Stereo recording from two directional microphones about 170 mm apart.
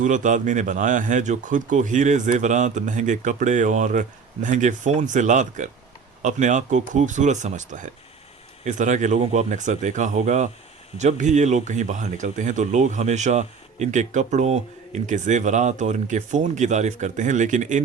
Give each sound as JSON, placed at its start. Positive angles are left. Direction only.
{"t": 0.0, "sound": "speech", "side_deg": -50}